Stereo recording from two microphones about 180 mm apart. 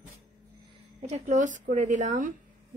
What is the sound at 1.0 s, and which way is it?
Speech, 40° right (ahead or behind).